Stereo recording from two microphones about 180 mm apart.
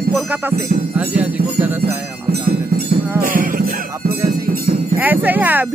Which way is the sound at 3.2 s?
50° right (ahead or behind).